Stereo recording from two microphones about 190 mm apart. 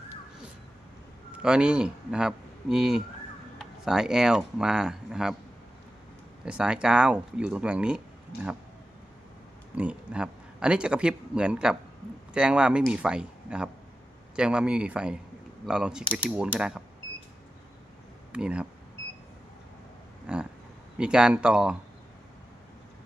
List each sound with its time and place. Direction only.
1.3 s speech: 5° right (ahead or behind)
6.4 s speech: 5° right (ahead or behind)
8.3 s speech: 55° left (ahead or behind)
9.7 s speech: 5° right (ahead or behind)
18.3 s speech: 5° right (ahead or behind)
20.2 s a sound: 5° right (ahead or behind)
21.0 s speech: 5° right (ahead or behind)